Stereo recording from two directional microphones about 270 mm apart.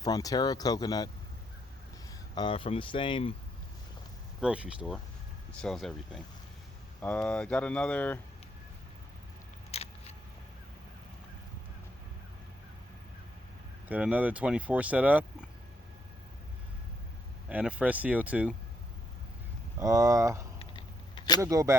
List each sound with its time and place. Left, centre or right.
0.0 s speech: centre
2.3 s speech: centre
4.4 s speech: centre
9.7 s a sound: left
13.8 s speech: centre
17.5 s speech: centre
19.8 s speech: centre
20.6 s a sound: centre
21.4 s speech: centre